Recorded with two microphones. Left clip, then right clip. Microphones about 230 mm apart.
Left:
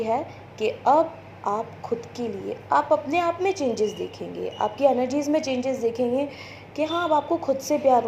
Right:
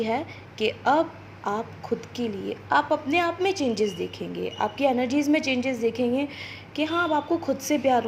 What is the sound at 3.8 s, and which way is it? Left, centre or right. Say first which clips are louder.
A woman's voice: left 1 dB; right.